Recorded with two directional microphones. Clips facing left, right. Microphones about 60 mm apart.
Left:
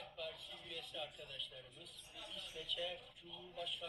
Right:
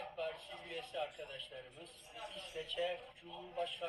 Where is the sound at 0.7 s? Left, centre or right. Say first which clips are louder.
Right 7 dB; right.